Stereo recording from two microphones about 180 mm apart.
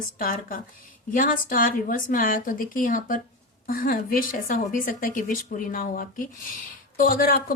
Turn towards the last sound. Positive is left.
turn(degrees=55)  # may be behind; listen again after turning